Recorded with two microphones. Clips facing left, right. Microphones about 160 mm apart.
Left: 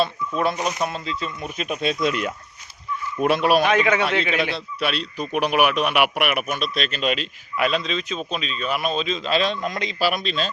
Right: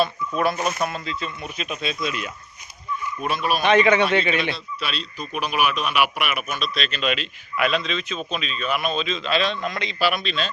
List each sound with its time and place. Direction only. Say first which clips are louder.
0.3 s speech: even; 20° left (ahead or behind)
1.0 s a man's voice: left 2 dB; 40° left (ahead or behind); by 2.3 s 60° left (ahead or behind)
3.2 s speech: left 6 dB; 70° left (ahead or behind)
3.6 s a man's voice: right 2 dB; 5° left (ahead or behind)
4.2 s speech: even; 75° left (ahead or behind)
4.5 s a man's voice: left 5 dB; 60° left (ahead or behind); by 10.5 s 40° left (ahead or behind)